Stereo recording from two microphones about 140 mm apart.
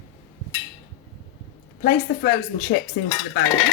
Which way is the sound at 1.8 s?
85° left.